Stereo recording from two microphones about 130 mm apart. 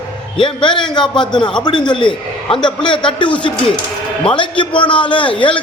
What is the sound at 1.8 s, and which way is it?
A man's voice, 40° left (ahead or behind).